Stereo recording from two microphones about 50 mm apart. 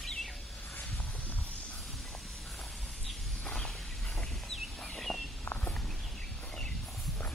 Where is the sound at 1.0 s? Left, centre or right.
Left.